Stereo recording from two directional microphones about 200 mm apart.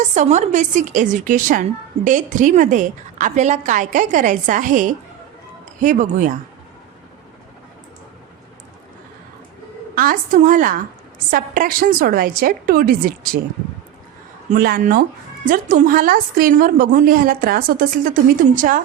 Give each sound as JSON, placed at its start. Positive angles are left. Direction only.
{"t": 0.0, "sound": "a woman's voice", "side_deg": -35}
{"t": 9.9, "sound": "a woman's voice", "side_deg": -45}
{"t": 14.5, "sound": "a woman's voice", "side_deg": -45}